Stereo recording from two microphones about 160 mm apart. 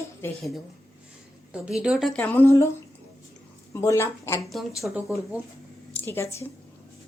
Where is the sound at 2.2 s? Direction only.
10° left (ahead or behind).